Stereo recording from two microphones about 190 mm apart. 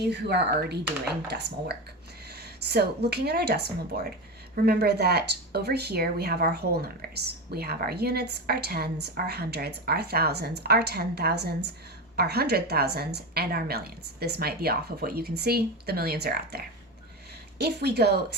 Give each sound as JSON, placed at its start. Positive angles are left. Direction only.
{"t": 0.1, "sound": "speech", "side_deg": -60}